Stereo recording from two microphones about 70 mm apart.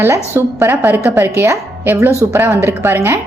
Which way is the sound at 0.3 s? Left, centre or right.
Right.